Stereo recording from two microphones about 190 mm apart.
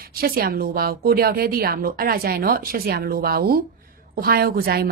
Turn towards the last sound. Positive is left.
turn(degrees=-55)  # may be behind; listen again after turning